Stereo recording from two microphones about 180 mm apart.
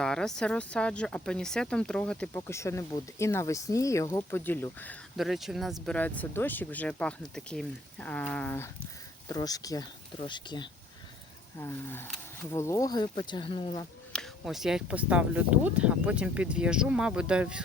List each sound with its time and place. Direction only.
0.0 s speech: 5° left (ahead or behind)
5.1 s speech: centre (ahead or behind); by 10.7 s 25° left (ahead or behind)
11.5 s speech: 15° left (ahead or behind)
14.1 s speech: centre (ahead or behind)